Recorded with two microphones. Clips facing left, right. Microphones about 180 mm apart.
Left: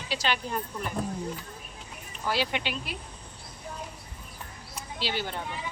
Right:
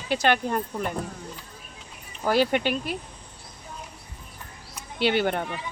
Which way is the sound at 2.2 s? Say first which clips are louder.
Right 8 dB; 50° right (ahead or behind).